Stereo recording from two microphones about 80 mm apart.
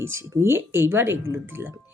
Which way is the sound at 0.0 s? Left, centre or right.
Right.